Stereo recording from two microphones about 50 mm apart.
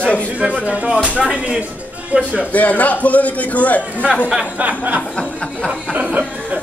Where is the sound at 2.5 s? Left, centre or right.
Left.